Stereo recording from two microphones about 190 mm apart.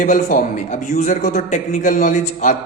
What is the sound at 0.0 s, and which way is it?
A man's voice, 45° left (ahead or behind).